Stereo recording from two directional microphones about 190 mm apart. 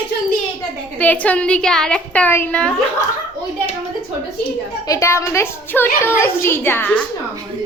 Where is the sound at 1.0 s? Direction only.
10° left (ahead or behind).